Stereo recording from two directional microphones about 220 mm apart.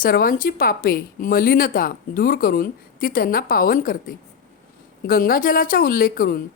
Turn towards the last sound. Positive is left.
turn(degrees=40)  # may be behind; listen again after turning